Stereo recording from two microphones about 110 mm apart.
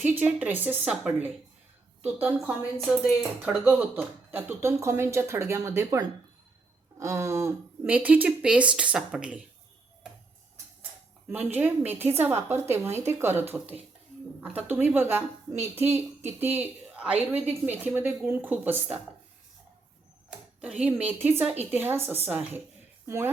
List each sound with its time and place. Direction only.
0.0 s speech: 15° right (ahead or behind)
7.0 s speech: 25° right (ahead or behind)
7.9 s speech: 15° right (ahead or behind)
11.3 s speech: 15° right (ahead or behind)
14.5 s speech: 15° right (ahead or behind)
20.6 s speech: 10° right (ahead or behind)
23.0 s speech: 25° right (ahead or behind)